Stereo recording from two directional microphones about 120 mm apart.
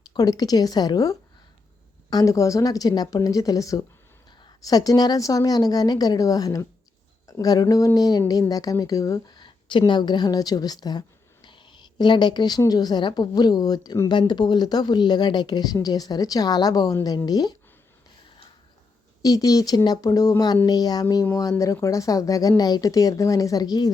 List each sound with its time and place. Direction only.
0.1 s a woman's voice: 30° left (ahead or behind)
19.2 s speech: 30° left (ahead or behind)